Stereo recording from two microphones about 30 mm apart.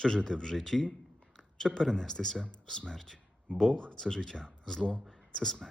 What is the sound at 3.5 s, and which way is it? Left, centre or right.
Speech, left.